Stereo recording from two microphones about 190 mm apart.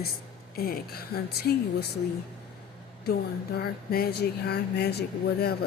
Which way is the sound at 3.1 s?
55° left (ahead or behind).